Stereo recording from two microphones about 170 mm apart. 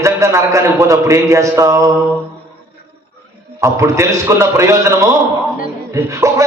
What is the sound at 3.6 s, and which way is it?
A man's voice, 15° right (ahead or behind).